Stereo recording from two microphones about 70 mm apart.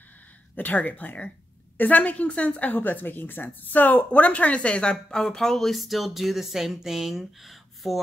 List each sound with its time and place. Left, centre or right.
0.6 s speech: left; by 8.0 s centre